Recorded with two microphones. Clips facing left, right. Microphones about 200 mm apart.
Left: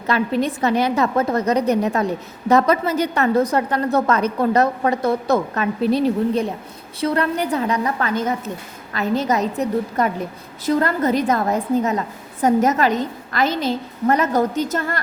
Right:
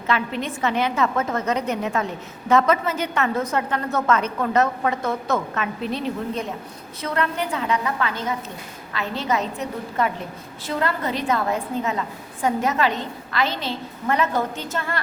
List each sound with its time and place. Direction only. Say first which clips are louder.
0.1 s a woman's voice: left 5 dB; 40° left (ahead or behind)